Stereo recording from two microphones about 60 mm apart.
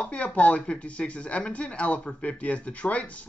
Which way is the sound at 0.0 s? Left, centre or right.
Left.